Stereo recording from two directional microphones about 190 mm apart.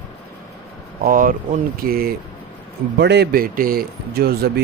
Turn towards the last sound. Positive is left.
turn(degrees=-55)  # may be behind; listen again after turning